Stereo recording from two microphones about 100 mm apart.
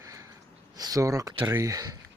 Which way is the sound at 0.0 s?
35° right (ahead or behind).